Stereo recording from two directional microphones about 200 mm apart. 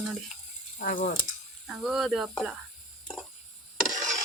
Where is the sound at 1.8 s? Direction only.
Centre (ahead or behind).